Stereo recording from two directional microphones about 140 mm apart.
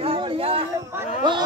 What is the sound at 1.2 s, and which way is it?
Speech, 30° right (ahead or behind).